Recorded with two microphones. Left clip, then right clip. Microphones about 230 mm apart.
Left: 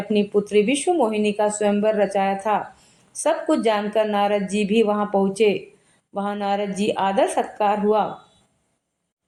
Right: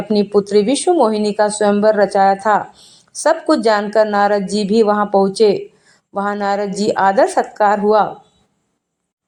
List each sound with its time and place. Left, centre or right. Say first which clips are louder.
0.1 s speech: right 6 dB; right